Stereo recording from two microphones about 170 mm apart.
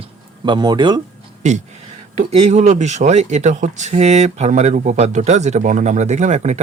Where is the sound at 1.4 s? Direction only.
45° right (ahead or behind).